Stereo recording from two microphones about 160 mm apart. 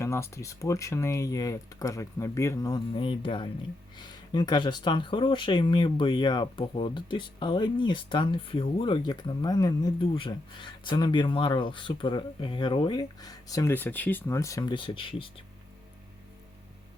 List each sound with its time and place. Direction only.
0.0 s speech: 15° left (ahead or behind)